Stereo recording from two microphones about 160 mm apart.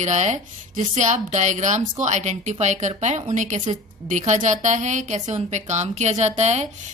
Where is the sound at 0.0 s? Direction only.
50° right (ahead or behind).